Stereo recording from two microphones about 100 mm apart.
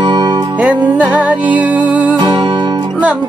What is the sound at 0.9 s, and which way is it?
Music, 15° right (ahead or behind).